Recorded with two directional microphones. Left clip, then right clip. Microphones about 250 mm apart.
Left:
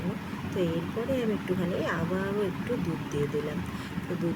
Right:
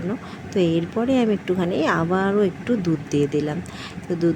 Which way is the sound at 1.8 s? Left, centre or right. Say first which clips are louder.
Right 10 dB; right.